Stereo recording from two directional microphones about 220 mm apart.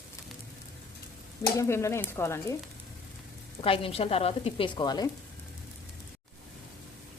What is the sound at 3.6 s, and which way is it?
Speech, 25° left (ahead or behind).